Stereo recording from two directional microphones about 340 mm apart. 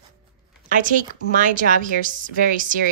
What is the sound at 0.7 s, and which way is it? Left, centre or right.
A woman's voice, right.